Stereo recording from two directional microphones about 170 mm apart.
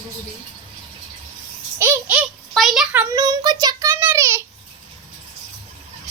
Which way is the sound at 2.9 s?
10° right (ahead or behind).